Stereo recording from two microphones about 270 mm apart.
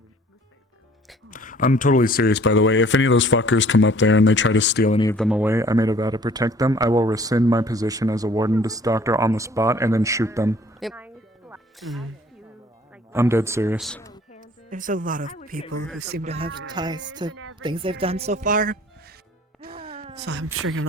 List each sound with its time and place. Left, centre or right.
1.3 s speech: left
4.9 s speech: centre
5.1 s speech: centre
10.8 s music: centre
13.1 s speech: centre
14.7 s speech: right
16.2 s speech: right
19.6 s music: right
20.1 s speech: right